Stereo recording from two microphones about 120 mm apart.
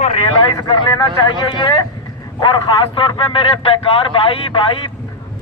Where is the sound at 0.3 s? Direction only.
40° left (ahead or behind).